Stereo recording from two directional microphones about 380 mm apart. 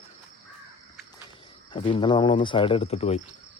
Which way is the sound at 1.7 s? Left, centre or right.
Centre.